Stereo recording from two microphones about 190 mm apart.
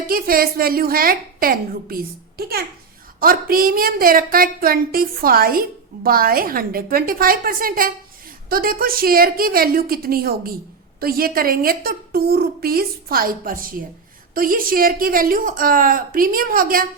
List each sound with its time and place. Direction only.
0.1 s a woman's voice: 50° right (ahead or behind)
3.2 s a woman's voice: 50° right (ahead or behind)